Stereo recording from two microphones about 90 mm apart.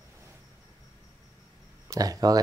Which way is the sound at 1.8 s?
40° right (ahead or behind).